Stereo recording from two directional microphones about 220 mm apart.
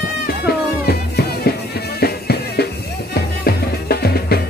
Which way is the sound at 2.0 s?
45° left (ahead or behind).